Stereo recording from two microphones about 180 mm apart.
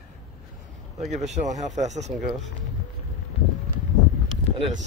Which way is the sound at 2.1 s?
Centre (ahead or behind).